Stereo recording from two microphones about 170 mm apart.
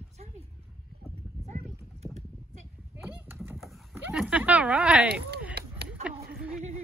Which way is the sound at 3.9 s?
10° right (ahead or behind).